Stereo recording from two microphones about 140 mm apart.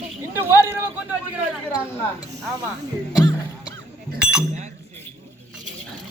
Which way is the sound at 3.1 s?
30° left (ahead or behind).